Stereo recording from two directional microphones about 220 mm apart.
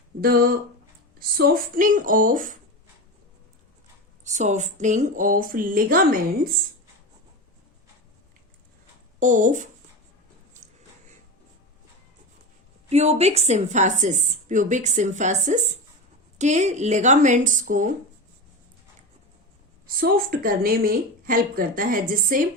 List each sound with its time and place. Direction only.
0.2 s a woman's voice: 40° right (ahead or behind)
4.2 s a woman's voice: 30° right (ahead or behind)
9.2 s a woman's voice: 35° right (ahead or behind)
12.9 s a woman's voice: 30° right (ahead or behind)
20.0 s a woman's voice: 40° right (ahead or behind)